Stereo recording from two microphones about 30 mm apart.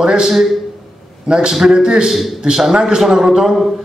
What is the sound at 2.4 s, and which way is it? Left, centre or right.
A man's voice, right.